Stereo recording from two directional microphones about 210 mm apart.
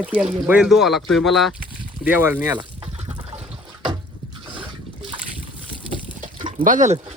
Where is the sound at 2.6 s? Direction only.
25° right (ahead or behind).